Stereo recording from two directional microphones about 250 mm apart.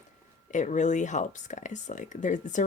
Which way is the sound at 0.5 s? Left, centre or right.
Left.